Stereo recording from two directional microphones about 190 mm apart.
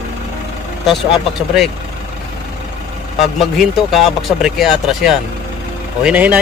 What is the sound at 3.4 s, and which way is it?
Speech, centre (ahead or behind).